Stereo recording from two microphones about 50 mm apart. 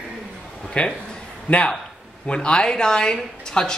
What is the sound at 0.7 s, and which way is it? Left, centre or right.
Speech, left.